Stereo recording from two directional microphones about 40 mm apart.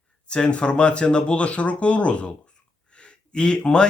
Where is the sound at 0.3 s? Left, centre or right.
Left.